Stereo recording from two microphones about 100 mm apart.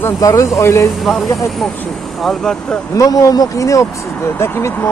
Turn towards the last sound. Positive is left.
turn(degrees=20)  # may be behind; listen again after turning